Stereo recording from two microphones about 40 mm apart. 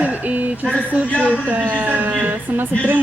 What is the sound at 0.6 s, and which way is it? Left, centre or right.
Speech, left.